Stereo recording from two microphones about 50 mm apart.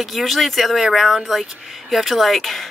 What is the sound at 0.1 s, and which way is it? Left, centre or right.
Speech, centre.